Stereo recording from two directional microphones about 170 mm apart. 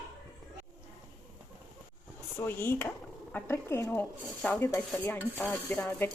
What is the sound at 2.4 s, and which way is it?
Speech, 15° left (ahead or behind).